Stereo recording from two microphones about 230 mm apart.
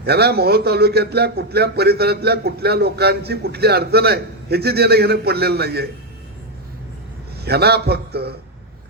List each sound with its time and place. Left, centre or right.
0.0 s a man's voice: right
7.4 s a man's voice: right